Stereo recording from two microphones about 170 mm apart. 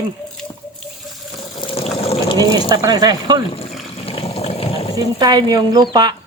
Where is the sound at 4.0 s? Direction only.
35° left (ahead or behind).